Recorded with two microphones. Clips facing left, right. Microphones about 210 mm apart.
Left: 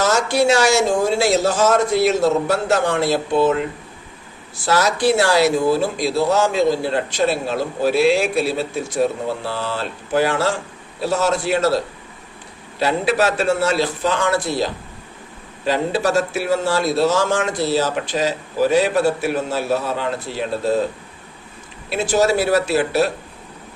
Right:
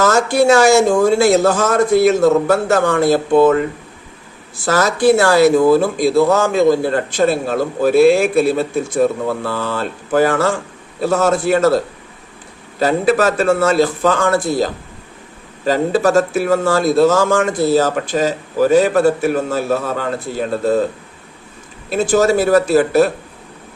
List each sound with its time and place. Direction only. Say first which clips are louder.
0.0 s speech: right 4 dB; 50° right (ahead or behind)
12.8 s speech: right 4 dB; 45° right (ahead or behind)
21.8 s speech: right 4 dB; 50° right (ahead or behind)